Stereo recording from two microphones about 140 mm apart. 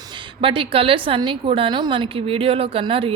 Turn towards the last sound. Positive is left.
turn(degrees=-40)  # may be behind; listen again after turning